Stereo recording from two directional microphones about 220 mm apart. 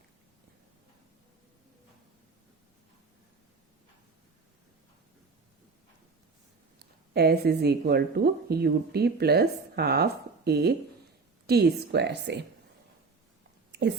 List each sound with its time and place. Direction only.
6.7 s speech: 45° right (ahead or behind)